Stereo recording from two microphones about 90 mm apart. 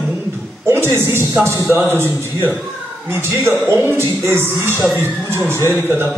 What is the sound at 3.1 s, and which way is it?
Speech, 30° right (ahead or behind).